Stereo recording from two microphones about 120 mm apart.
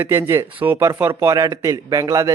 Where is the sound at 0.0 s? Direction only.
20° right (ahead or behind).